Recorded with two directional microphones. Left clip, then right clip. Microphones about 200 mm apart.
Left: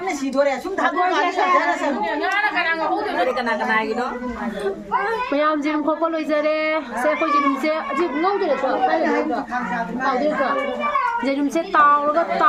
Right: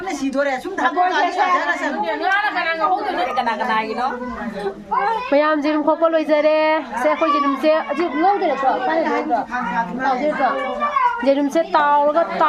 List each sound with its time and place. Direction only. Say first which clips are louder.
0.3 s a woman's voice: left 1 dB; 30° left (ahead or behind)
3.3 s a woman's voice: right 1 dB; 25° right (ahead or behind)
5.3 s a woman's voice: right 4 dB; 35° right (ahead or behind)
11.3 s a woman's voice: right 5 dB; 30° right (ahead or behind)